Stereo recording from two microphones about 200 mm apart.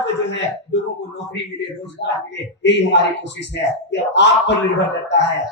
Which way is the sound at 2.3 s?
60° left (ahead or behind).